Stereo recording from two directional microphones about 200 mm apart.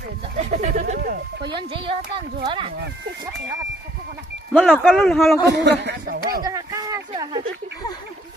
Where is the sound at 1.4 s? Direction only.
25° right (ahead or behind).